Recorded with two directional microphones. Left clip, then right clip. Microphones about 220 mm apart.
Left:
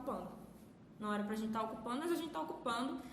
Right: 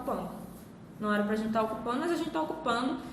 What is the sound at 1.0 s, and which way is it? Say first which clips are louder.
A woman's voice: right 10 dB; 45° left (ahead or behind).